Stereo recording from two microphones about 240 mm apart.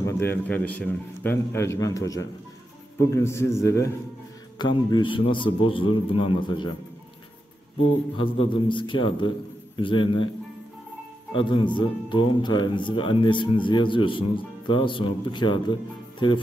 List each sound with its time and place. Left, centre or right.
0.0 s a man's voice: centre
8.2 s speech: left
11.3 s speech: centre